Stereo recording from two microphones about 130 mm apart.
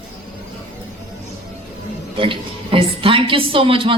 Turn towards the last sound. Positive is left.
turn(degrees=-40)  # may be behind; listen again after turning